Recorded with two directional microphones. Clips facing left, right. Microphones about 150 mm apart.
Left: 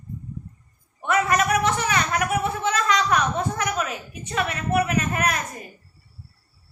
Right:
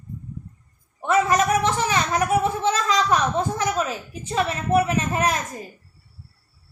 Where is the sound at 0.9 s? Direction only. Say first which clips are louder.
Right 2 dB; 25° right (ahead or behind).